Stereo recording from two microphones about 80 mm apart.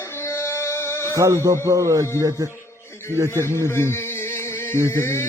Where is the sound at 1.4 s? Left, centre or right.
Right.